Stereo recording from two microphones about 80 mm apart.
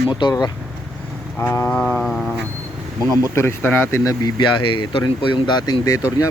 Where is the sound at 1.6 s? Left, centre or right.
Centre.